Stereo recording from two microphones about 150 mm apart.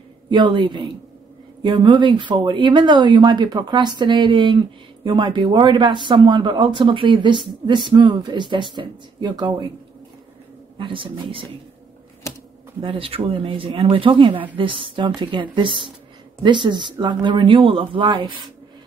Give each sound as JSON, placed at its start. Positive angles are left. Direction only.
{"t": 0.3, "sound": "speech", "side_deg": -30}
{"t": 10.8, "sound": "speech", "side_deg": -35}
{"t": 12.8, "sound": "speech", "side_deg": -35}